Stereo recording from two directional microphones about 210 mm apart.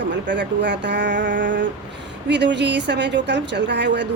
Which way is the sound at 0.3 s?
55° right (ahead or behind).